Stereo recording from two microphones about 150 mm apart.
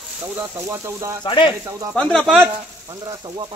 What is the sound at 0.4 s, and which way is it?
Speech, 20° right (ahead or behind).